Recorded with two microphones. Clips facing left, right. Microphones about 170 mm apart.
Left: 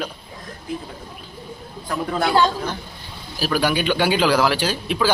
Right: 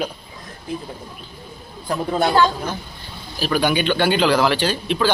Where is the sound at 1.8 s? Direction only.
25° right (ahead or behind).